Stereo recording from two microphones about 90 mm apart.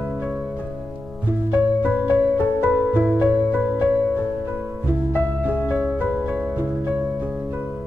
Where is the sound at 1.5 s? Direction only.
20° right (ahead or behind).